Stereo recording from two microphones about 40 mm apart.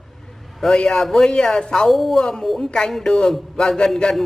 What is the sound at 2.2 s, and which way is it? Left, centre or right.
Speech, centre.